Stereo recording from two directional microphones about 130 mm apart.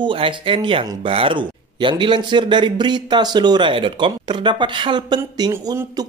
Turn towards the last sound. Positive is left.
turn(degrees=-30)  # may be behind; listen again after turning